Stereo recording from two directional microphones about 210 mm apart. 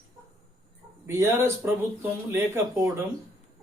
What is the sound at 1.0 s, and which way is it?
Speech, 10° right (ahead or behind).